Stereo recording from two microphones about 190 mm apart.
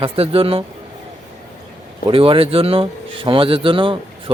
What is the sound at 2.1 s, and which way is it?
Speech, 30° right (ahead or behind).